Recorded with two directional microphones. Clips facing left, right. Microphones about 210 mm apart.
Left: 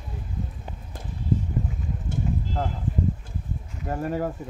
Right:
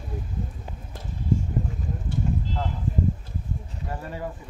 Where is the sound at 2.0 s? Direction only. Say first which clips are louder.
Right 1 dB; 50° left (ahead or behind).